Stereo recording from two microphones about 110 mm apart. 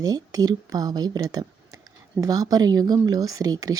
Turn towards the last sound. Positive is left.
turn(degrees=-35)  # may be behind; listen again after turning